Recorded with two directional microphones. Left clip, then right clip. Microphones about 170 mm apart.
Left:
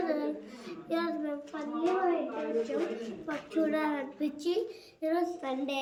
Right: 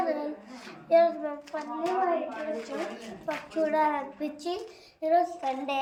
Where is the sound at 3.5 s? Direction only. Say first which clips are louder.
Right 5 dB; 10° left (ahead or behind).